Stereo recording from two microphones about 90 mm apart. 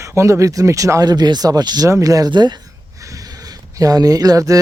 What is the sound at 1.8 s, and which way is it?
Speech, 35° right (ahead or behind).